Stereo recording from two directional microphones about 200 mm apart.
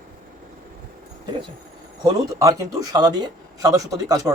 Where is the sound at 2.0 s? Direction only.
15° right (ahead or behind).